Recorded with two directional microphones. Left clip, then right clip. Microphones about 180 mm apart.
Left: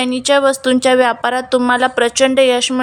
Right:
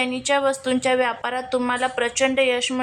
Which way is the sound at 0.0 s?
30° left (ahead or behind).